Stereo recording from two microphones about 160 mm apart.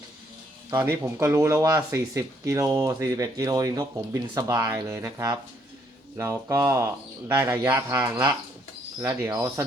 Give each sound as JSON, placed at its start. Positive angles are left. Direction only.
{"t": 0.7, "sound": "speech", "side_deg": -15}